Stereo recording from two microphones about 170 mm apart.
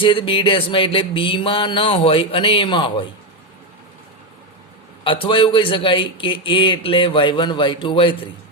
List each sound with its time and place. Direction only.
0.0 s music: 30° left (ahead or behind)
5.0 s speech: 30° left (ahead or behind)